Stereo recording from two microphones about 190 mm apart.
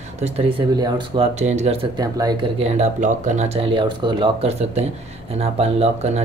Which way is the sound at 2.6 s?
40° right (ahead or behind).